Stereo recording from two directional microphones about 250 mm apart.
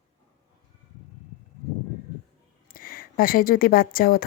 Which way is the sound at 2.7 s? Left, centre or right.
Left.